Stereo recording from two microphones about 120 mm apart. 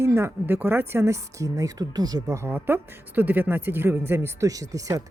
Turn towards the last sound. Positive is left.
turn(degrees=-30)  # may be behind; listen again after turning